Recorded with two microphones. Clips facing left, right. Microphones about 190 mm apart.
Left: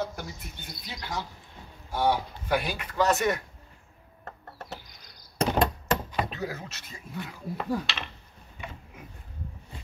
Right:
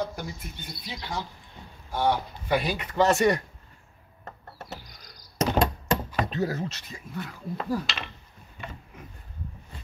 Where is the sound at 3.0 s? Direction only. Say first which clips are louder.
Right 3 dB; 25° right (ahead or behind).